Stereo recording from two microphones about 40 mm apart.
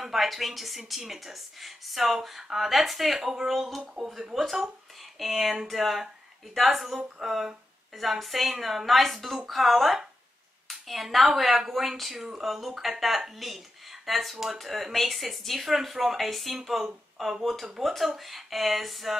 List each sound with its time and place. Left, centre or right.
0.0 s speech: centre